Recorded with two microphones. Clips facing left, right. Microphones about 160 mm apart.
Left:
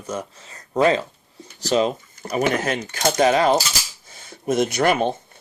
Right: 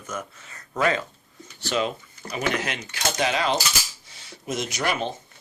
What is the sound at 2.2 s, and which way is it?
Speech, 45° left (ahead or behind).